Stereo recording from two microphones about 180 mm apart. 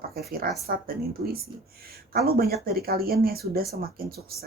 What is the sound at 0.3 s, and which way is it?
Speech, 55° right (ahead or behind).